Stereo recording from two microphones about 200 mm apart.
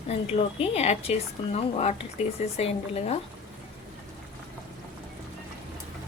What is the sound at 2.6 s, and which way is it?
Speech, 30° left (ahead or behind).